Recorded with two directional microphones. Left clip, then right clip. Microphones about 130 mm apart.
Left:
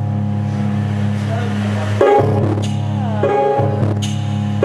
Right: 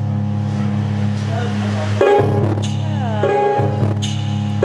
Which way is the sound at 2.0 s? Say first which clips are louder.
Left 1 dB; 20° left (ahead or behind).